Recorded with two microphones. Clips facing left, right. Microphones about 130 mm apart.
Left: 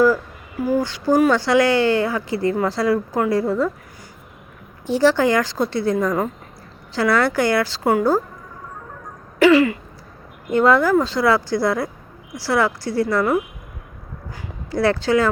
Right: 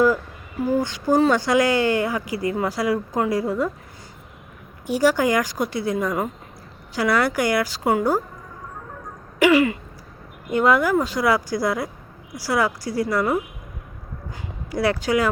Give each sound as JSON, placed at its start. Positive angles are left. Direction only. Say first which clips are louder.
{"t": 0.6, "sound": "speech", "louder": "left 2 dB", "side_deg": -20}
{"t": 4.9, "sound": "speech", "louder": "left 3 dB", "side_deg": -15}
{"t": 9.4, "sound": "speech", "louder": "left 3 dB", "side_deg": -20}